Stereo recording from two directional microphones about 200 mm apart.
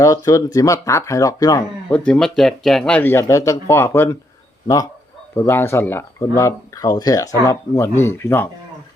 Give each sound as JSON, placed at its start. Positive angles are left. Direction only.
{"t": 0.0, "sound": "speech", "side_deg": 15}
{"t": 1.9, "sound": "speech", "side_deg": 5}
{"t": 5.5, "sound": "speech", "side_deg": 10}